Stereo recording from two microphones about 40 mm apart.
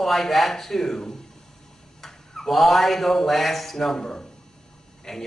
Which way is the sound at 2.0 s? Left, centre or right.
Centre.